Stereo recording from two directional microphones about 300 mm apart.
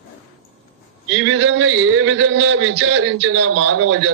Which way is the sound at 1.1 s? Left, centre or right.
Right.